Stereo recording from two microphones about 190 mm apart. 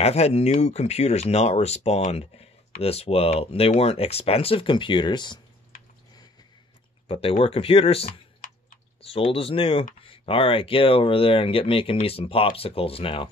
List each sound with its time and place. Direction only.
0.0 s speech: 35° left (ahead or behind)
7.1 s speech: 30° left (ahead or behind)